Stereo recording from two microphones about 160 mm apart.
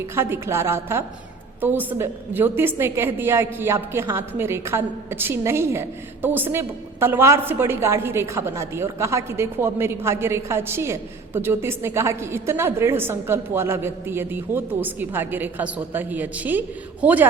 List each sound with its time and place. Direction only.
0.0 s a woman's voice: 15° right (ahead or behind)